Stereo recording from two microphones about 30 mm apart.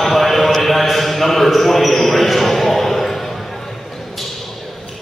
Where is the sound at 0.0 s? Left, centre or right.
Centre.